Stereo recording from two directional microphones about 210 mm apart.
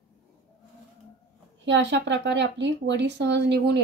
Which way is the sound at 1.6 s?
60° right (ahead or behind).